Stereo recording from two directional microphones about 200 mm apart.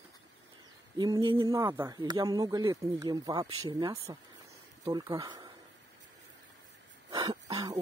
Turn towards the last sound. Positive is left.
turn(degrees=-20)  # may be behind; listen again after turning